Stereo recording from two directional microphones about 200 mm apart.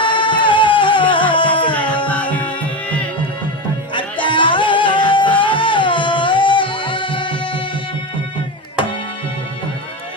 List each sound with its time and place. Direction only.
0.0 s music: 25° left (ahead or behind)
2.0 s music: 5° left (ahead or behind)
3.9 s music: 25° left (ahead or behind)